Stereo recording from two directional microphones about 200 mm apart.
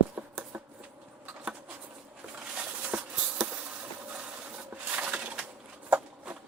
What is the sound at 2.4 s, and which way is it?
Bee, 5° right (ahead or behind).